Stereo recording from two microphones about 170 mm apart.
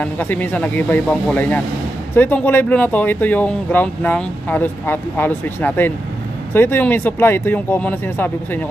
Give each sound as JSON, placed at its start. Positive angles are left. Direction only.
{"t": 0.0, "sound": "speech", "side_deg": 10}